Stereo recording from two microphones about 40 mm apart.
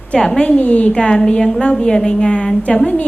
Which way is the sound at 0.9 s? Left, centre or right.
Left.